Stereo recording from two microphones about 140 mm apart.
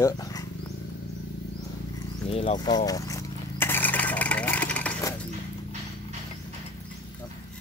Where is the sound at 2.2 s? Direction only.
45° left (ahead or behind).